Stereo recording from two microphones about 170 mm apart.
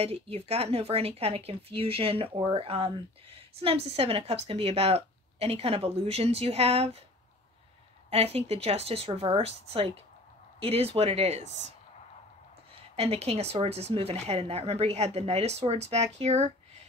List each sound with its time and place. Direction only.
0.0 s speech: 35° right (ahead or behind)
8.1 s speech: 35° right (ahead or behind)
11.4 s speech: 90° right
12.9 s speech: 40° right (ahead or behind)